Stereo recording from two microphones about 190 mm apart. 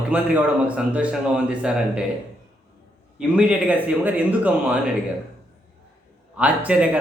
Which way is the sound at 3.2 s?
5° right (ahead or behind).